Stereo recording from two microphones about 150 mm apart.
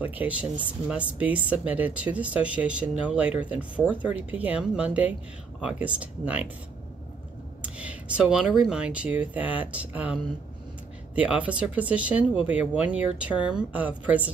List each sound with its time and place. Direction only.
0.0 s speech: 10° right (ahead or behind)
7.6 s speech: 10° right (ahead or behind)